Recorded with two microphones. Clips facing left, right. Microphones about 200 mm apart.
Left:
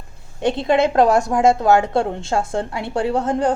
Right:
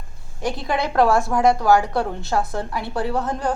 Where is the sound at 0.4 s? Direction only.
25° left (ahead or behind).